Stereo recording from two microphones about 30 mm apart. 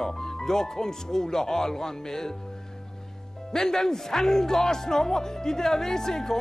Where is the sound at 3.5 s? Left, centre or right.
Centre.